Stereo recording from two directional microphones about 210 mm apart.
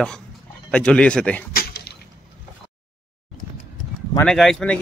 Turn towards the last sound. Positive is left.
turn(degrees=5)  # may be behind; listen again after turning